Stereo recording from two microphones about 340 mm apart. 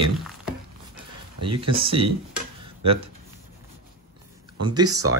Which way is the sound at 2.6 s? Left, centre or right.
Right.